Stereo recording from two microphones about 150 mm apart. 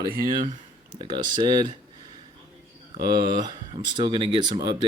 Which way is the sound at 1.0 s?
30° right (ahead or behind).